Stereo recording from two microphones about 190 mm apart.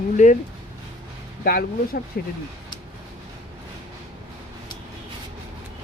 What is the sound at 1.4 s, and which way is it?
Speech, 50° left (ahead or behind).